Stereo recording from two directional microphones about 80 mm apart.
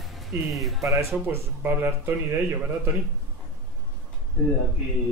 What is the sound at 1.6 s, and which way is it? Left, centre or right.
Speech, right.